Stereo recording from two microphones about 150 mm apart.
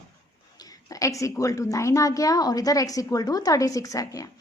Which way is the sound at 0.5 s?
25° left (ahead or behind).